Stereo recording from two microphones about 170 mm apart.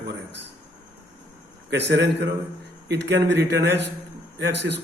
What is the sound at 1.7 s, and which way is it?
A man's voice, 90° right.